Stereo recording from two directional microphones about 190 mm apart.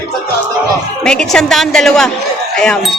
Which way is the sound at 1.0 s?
5° left (ahead or behind).